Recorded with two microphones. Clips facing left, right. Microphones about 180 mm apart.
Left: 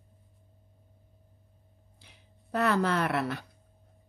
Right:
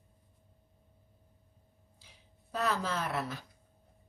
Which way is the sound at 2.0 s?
60° left (ahead or behind).